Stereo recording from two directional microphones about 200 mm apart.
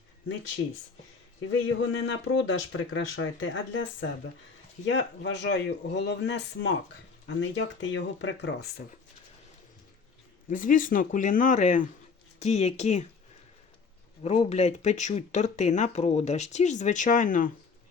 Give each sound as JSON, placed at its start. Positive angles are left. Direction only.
{"t": 1.5, "sound": "speech", "side_deg": 75}
{"t": 4.9, "sound": "a man's voice", "side_deg": 65}
{"t": 10.5, "sound": "speech", "side_deg": 40}
{"t": 14.3, "sound": "speech", "side_deg": 35}